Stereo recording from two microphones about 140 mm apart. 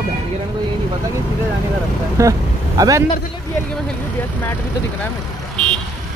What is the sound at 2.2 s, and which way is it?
Speech, 25° right (ahead or behind).